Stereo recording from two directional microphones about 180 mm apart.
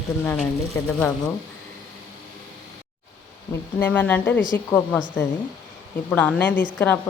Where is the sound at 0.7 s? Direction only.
15° left (ahead or behind).